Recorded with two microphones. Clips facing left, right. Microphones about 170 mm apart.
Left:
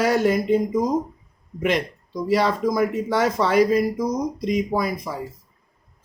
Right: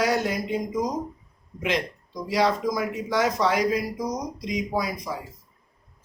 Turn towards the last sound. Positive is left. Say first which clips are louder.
# left 4 dB
turn(degrees=55)  # may be behind; listen again after turning